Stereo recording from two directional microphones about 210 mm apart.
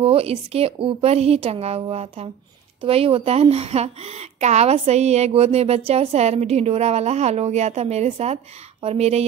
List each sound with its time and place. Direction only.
0.0 s a woman's voice: 25° right (ahead or behind)